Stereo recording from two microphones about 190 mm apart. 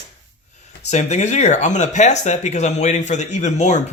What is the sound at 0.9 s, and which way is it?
Speech, 35° left (ahead or behind).